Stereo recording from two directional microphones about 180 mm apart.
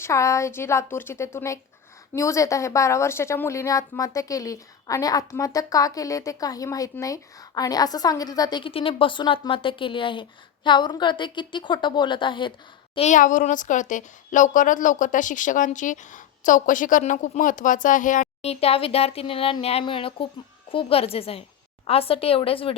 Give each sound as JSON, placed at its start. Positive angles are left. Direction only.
{"t": 0.0, "sound": "a woman's voice", "side_deg": 15}
{"t": 13.1, "sound": "a woman's voice", "side_deg": 45}